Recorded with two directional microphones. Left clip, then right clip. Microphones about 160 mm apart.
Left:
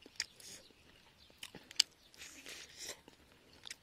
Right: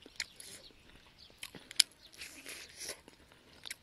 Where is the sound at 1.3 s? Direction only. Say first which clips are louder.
Right 3 dB; 15° left (ahead or behind).